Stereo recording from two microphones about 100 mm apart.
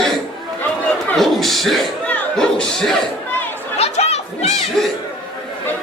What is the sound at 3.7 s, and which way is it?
Crowd, 90° left.